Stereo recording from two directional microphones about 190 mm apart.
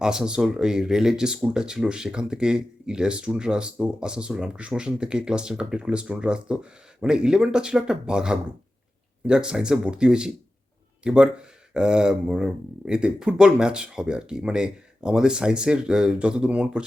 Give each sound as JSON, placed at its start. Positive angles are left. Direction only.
{"t": 0.0, "sound": "speech", "side_deg": -5}